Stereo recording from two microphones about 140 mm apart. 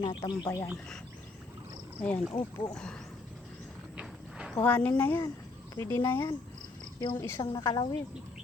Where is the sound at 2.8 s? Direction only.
5° left (ahead or behind).